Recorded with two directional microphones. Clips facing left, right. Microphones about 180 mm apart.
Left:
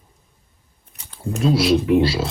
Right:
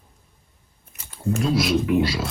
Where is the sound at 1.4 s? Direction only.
30° left (ahead or behind).